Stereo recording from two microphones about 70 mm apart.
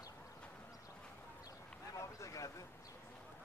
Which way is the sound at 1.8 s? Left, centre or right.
Left.